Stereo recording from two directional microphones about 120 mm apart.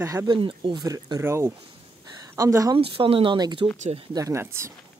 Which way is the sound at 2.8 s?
50° right (ahead or behind).